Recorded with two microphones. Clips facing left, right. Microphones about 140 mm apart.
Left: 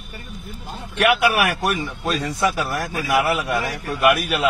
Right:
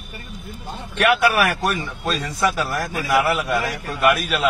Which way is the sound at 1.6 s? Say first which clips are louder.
Even; 20° left (ahead or behind).